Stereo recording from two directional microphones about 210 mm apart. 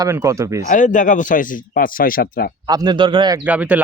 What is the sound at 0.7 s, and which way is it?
Speech, 40° left (ahead or behind).